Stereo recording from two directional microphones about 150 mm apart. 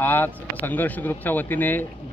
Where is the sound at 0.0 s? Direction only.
15° left (ahead or behind).